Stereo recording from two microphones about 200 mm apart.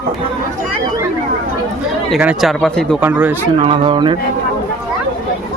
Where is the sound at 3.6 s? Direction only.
25° right (ahead or behind).